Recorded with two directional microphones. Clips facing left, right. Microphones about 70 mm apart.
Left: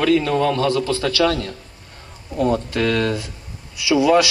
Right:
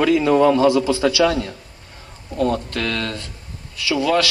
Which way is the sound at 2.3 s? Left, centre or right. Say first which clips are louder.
Left 2 dB; centre.